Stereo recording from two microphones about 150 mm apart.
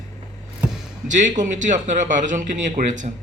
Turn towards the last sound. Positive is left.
turn(degrees=-55)  # may be behind; listen again after turning